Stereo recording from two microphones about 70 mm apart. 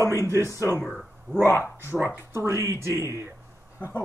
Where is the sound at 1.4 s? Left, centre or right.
Left.